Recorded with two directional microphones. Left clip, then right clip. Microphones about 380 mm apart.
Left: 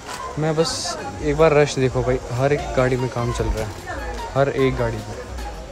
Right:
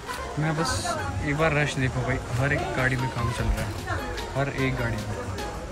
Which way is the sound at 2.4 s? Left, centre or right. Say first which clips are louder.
Left 6 dB; centre.